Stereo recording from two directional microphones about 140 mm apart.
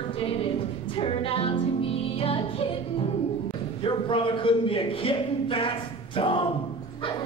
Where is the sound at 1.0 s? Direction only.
40° left (ahead or behind).